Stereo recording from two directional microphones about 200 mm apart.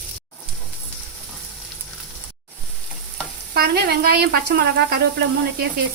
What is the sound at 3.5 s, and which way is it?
Speech, 50° right (ahead or behind).